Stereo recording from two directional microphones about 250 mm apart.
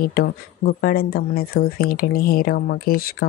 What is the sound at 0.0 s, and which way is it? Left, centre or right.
Speech, left.